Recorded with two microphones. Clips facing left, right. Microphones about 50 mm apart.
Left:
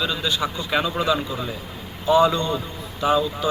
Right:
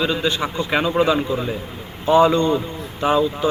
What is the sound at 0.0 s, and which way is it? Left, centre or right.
A man's voice, right.